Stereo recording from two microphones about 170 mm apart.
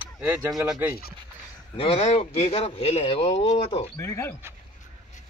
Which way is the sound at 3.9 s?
15° left (ahead or behind).